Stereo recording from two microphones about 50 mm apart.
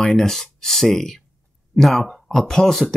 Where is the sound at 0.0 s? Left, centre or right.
Centre.